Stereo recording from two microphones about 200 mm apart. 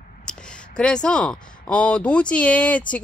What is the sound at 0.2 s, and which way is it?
Speech, 5° left (ahead or behind).